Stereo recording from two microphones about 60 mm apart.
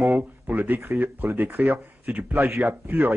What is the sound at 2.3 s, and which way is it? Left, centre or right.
Speech, right.